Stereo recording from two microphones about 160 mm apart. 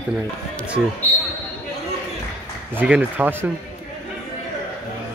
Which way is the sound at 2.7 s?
10° right (ahead or behind).